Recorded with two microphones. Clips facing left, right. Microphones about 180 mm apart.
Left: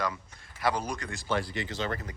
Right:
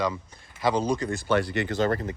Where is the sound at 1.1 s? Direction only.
65° right (ahead or behind).